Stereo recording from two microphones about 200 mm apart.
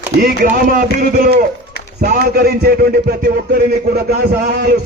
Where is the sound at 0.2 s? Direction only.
50° right (ahead or behind).